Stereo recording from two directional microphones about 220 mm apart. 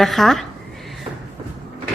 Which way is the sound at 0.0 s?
Centre (ahead or behind).